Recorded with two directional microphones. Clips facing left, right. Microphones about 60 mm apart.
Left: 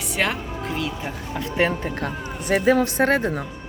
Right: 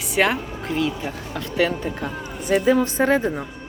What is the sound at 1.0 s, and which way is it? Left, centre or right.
Speech, centre.